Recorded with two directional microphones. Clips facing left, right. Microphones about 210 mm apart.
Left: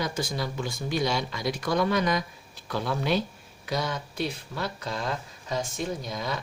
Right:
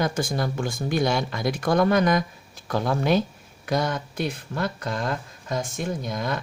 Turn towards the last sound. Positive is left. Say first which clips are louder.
# right 4 dB
turn(degrees=-50)  # may be behind; listen again after turning